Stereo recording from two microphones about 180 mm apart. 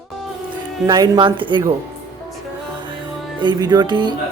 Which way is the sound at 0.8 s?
20° right (ahead or behind).